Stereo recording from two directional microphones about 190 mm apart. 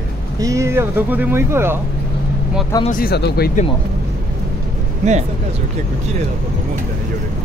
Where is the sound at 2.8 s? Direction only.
50° left (ahead or behind).